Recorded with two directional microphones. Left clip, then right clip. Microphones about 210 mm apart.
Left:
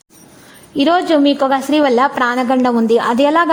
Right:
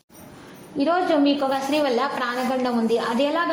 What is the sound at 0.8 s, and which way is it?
A woman's voice, 45° left (ahead or behind).